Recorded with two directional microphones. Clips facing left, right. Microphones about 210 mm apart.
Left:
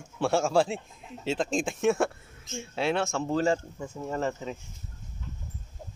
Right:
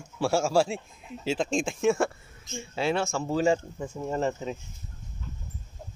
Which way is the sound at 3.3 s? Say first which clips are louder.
Right 2 dB; 15° right (ahead or behind).